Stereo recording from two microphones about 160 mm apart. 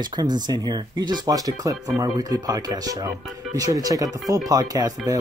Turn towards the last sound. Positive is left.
turn(degrees=-25)  # may be behind; listen again after turning